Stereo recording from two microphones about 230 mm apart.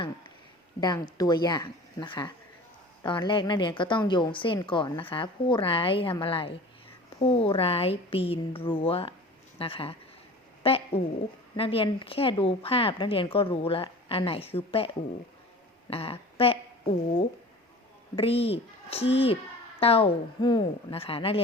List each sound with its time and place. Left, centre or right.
0.8 s a woman's voice: centre
10.6 s a sound: left
11.5 s a woman's voice: left
15.9 s speech: left
18.2 s a woman's voice: left